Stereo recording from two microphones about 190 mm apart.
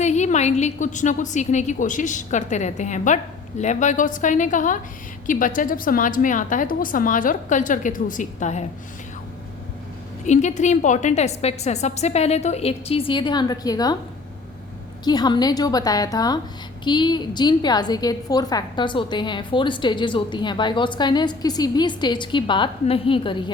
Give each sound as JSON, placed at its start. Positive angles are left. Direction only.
{"t": 0.0, "sound": "a woman's voice", "side_deg": 35}
{"t": 10.2, "sound": "a woman's voice", "side_deg": 40}
{"t": 15.0, "sound": "a woman's voice", "side_deg": 20}